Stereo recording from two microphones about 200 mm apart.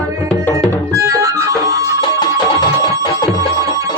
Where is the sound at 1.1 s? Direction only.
15° right (ahead or behind).